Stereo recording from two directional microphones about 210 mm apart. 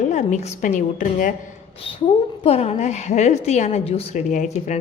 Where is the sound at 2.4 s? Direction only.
30° left (ahead or behind).